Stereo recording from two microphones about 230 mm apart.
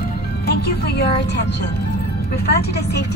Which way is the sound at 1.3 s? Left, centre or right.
Left.